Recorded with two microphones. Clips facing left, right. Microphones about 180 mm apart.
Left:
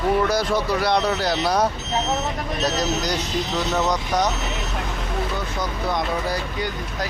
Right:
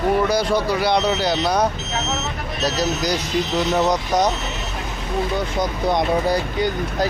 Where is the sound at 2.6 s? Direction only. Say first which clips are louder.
Right 3 dB; 5° right (ahead or behind).